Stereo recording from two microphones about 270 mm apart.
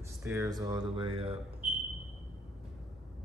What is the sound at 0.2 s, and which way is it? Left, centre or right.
Speech, centre.